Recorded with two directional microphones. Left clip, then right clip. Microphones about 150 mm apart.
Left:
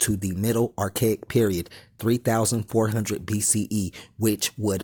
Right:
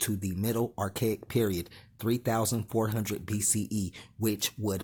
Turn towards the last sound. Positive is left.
turn(degrees=40)  # may be behind; listen again after turning